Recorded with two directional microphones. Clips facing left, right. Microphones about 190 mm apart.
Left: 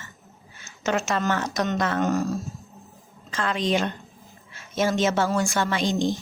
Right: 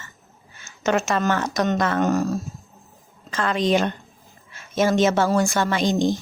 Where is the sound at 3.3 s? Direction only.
45° right (ahead or behind).